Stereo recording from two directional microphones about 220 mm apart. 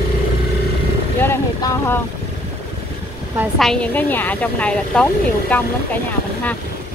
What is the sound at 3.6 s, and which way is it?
A woman's voice, 5° left (ahead or behind).